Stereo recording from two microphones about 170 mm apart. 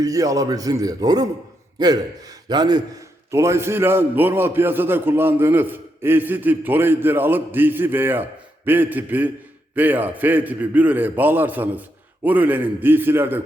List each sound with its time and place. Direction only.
0.0 s a man's voice: 20° right (ahead or behind)